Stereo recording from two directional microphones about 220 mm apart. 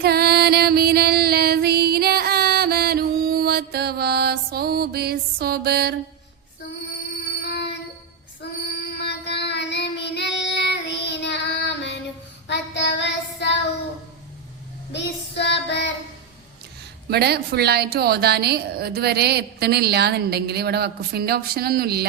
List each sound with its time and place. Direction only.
0.0 s female singing: 45° right (ahead or behind)
8.7 s child singing: 50° left (ahead or behind)
14.9 s child singing: 50° left (ahead or behind)
17.1 s a woman's voice: 45° right (ahead or behind)